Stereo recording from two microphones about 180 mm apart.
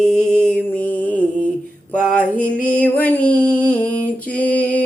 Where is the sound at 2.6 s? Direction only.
10° left (ahead or behind).